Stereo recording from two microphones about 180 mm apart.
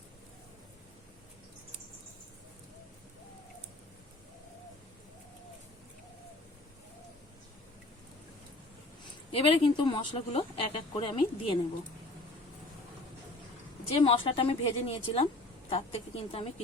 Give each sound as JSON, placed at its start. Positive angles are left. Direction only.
{"t": 9.3, "sound": "speech", "side_deg": 25}
{"t": 13.9, "sound": "a woman's voice", "side_deg": 30}